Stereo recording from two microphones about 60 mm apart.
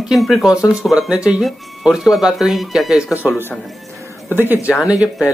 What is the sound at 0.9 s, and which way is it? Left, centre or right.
Speech, centre.